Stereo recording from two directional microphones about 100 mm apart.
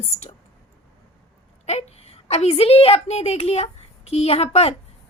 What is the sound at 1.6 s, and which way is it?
A woman's voice, 90° left.